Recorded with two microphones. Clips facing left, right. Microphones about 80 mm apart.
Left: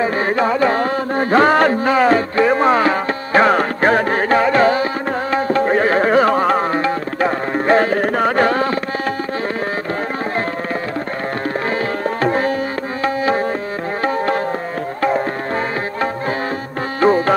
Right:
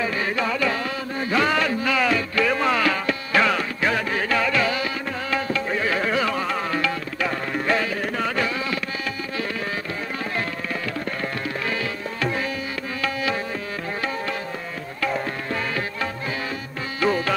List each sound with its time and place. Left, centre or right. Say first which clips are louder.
0.0 s music: left 8 dB; left
12.2 s tabla: left 8 dB; left
14.0 s tabla: left 12 dB; left
15.0 s music: left 8 dB; left
17.0 s music: left 8 dB; left